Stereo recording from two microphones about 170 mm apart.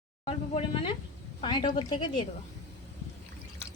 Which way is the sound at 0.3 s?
35° left (ahead or behind).